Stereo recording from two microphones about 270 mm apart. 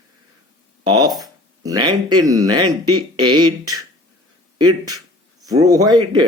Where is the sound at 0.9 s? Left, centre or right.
Centre.